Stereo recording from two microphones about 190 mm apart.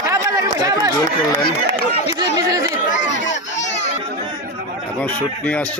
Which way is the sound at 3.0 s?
70° left (ahead or behind).